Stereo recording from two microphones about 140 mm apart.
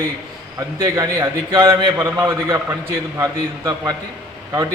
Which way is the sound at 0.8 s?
20° right (ahead or behind).